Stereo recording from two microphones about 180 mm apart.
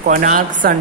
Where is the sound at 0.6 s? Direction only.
55° right (ahead or behind).